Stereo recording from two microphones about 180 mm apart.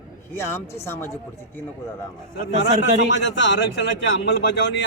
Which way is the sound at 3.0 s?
90° left.